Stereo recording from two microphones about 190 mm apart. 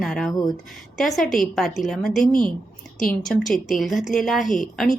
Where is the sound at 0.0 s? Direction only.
Centre (ahead or behind).